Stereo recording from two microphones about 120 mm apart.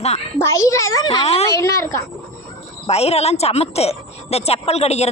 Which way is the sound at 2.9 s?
60° left (ahead or behind).